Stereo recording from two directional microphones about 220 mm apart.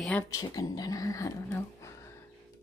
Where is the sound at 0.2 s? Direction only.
15° left (ahead or behind).